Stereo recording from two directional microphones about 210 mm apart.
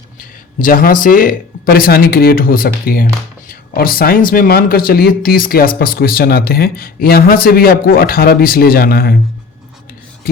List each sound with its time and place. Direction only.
0.2 s speech: 40° left (ahead or behind)